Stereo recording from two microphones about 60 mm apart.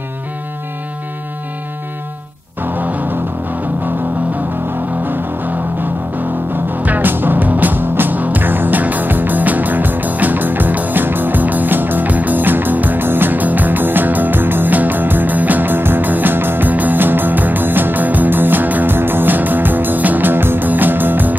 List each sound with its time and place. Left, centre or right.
2.6 s music: right
5.0 s music: right